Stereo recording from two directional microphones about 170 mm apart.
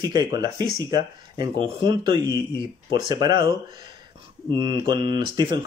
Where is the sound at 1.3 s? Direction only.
25° right (ahead or behind).